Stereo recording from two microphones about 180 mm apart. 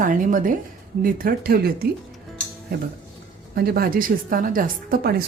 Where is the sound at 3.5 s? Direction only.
60° right (ahead or behind).